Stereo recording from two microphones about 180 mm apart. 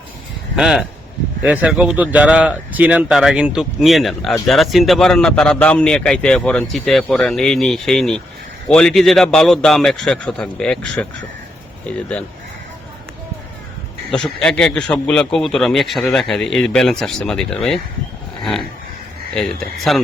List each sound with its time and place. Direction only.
0.5 s speech: 5° right (ahead or behind)
14.1 s speech: 5° left (ahead or behind)
19.3 s speech: 5° left (ahead or behind)